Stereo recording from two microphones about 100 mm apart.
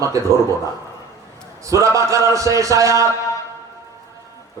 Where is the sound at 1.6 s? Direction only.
30° right (ahead or behind).